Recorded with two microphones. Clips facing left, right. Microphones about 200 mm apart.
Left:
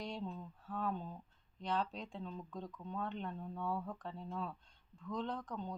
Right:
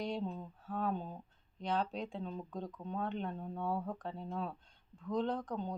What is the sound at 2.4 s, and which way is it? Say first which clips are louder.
Speech: right 4 dB; 25° right (ahead or behind).